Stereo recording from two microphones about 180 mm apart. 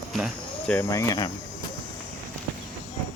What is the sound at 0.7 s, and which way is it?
Speech, 15° left (ahead or behind).